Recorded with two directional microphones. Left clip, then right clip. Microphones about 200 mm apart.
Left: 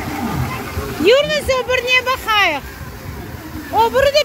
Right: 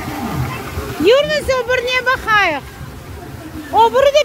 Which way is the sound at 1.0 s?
15° right (ahead or behind).